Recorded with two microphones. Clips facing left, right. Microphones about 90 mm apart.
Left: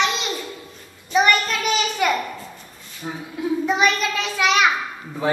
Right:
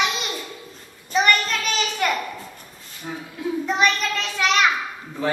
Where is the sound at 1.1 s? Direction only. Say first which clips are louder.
Left 2 dB; 5° left (ahead or behind).